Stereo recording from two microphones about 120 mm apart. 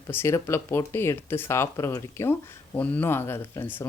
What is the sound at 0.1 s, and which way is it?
Speech, 20° left (ahead or behind).